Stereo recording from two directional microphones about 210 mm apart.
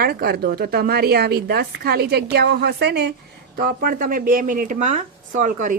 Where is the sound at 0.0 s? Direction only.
45° right (ahead or behind).